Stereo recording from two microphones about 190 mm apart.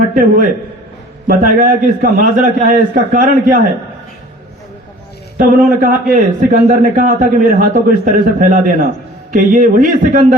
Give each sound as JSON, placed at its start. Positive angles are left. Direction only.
{"t": 0.1, "sound": "a man's voice", "side_deg": -50}
{"t": 5.5, "sound": "a man's voice", "side_deg": -45}